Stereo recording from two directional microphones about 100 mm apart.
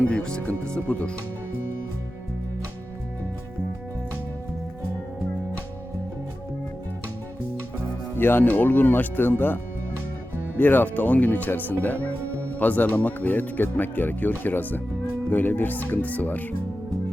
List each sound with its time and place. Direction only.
0.0 s speech: 10° left (ahead or behind)
8.1 s speech: 20° left (ahead or behind)
10.6 s speech: 20° left (ahead or behind)